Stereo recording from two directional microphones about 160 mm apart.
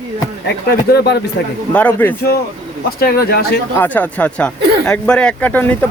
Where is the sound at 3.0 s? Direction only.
75° left (ahead or behind).